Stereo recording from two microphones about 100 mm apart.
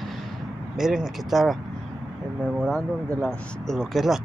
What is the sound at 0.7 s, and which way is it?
Speech, 5° right (ahead or behind).